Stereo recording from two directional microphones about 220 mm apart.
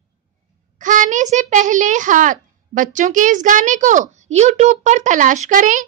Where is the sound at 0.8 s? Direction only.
35° right (ahead or behind).